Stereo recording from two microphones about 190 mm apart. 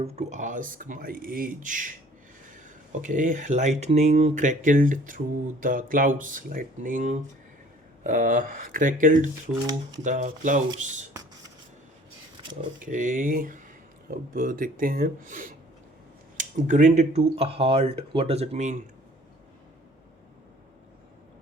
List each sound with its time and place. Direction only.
0.0 s speech: 35° right (ahead or behind)
12.4 s a sound: 25° right (ahead or behind)
12.9 s speech: 45° right (ahead or behind)